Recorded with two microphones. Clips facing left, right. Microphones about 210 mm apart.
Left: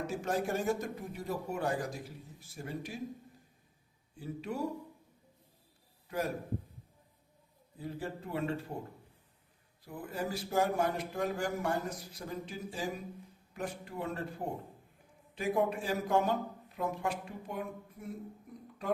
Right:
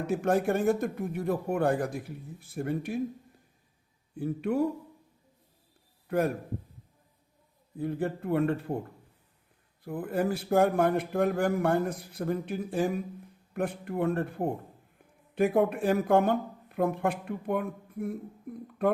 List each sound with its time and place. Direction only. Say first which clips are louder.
0.1 s a man's voice: right 10 dB; 60° right (ahead or behind)
4.2 s a man's voice: right 10 dB; 55° right (ahead or behind)
6.1 s a man's voice: right 8 dB; 60° right (ahead or behind)
7.8 s a man's voice: right 9 dB; 55° right (ahead or behind)
9.8 s a man's voice: right 9 dB; 55° right (ahead or behind)